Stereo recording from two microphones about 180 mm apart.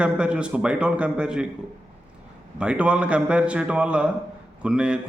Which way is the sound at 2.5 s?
5° right (ahead or behind).